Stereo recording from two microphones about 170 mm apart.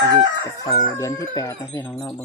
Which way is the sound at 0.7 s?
20° left (ahead or behind).